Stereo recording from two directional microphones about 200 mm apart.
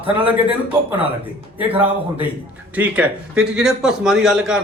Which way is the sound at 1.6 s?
10° right (ahead or behind).